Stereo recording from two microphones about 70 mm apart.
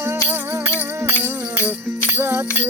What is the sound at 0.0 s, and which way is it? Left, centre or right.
Music, right.